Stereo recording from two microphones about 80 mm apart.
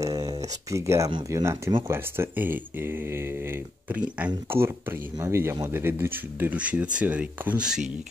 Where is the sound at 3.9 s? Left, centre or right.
Centre.